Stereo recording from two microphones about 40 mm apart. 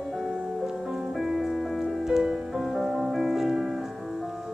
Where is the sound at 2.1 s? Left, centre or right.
Centre.